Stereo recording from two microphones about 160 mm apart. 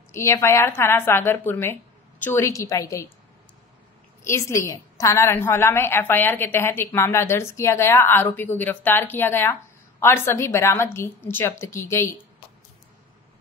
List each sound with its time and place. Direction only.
0.1 s a woman's voice: 15° left (ahead or behind)
4.2 s a woman's voice: 20° left (ahead or behind)